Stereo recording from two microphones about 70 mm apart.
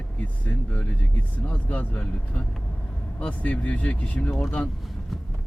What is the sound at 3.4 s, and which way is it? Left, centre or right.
Speech, left.